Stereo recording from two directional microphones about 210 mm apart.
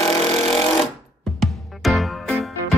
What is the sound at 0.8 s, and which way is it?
Music, centre (ahead or behind).